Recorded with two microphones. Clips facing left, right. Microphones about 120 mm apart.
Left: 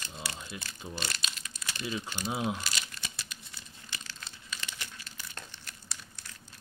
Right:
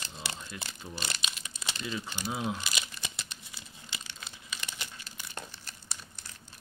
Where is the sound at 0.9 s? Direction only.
20° right (ahead or behind).